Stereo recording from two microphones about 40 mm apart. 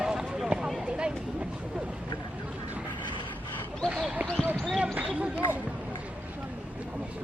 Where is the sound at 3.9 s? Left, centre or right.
Right.